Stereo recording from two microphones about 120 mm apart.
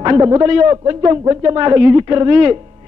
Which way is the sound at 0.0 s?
30° right (ahead or behind).